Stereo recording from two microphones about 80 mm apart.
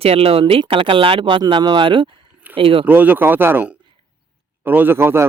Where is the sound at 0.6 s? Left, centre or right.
Right.